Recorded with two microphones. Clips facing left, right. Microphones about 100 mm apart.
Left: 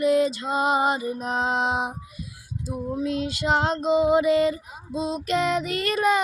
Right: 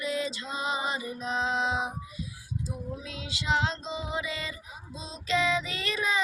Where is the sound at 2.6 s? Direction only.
55° left (ahead or behind).